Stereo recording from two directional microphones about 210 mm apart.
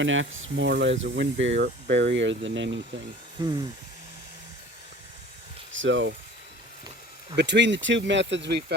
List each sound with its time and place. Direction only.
0.0 s speech: 65° right (ahead or behind)
3.4 s speech: 20° right (ahead or behind)
5.7 s speech: 65° right (ahead or behind)
7.3 s speech: 55° right (ahead or behind)